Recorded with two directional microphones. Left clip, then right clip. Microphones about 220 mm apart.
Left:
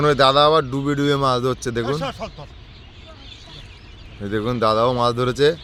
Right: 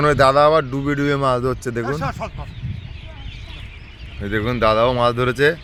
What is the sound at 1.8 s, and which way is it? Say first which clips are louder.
Speech: even; 25° left (ahead or behind).